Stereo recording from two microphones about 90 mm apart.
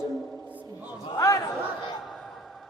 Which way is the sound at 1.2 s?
35° left (ahead or behind).